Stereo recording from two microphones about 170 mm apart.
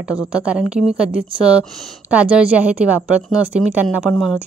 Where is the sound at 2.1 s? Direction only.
10° right (ahead or behind).